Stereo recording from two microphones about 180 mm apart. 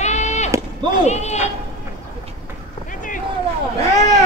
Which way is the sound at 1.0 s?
40° left (ahead or behind).